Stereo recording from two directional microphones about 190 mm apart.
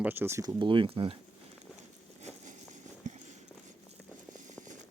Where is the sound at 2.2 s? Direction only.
35° right (ahead or behind).